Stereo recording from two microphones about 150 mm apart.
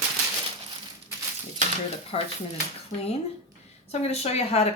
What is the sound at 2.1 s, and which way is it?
Speech, 40° left (ahead or behind).